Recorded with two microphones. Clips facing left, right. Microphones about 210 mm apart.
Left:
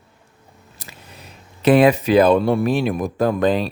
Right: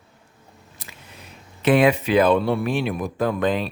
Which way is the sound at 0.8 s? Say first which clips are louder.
Left 3 dB; 40° left (ahead or behind).